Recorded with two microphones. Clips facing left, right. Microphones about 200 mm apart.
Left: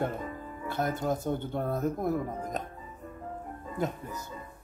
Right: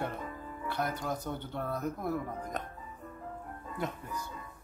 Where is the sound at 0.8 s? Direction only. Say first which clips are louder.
Left 4 dB; 25° left (ahead or behind).